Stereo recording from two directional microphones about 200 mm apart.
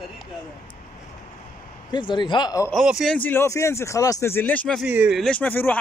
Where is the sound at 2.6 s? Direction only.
Centre (ahead or behind).